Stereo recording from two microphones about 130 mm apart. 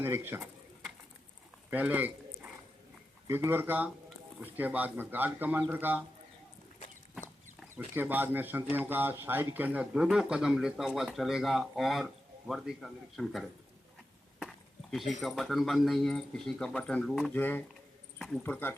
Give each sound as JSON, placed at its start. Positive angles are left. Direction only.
{"t": 0.0, "sound": "speech", "side_deg": -15}
{"t": 1.7, "sound": "a sound", "side_deg": -15}
{"t": 3.2, "sound": "speech", "side_deg": -20}
{"t": 7.9, "sound": "speech", "side_deg": -15}
{"t": 17.3, "sound": "speech", "side_deg": 15}